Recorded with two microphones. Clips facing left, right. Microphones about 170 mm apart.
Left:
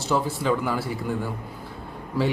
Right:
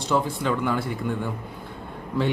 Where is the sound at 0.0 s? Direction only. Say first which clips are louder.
Even; 5° left (ahead or behind).